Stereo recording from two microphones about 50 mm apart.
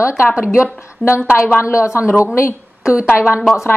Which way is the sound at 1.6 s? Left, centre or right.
Left.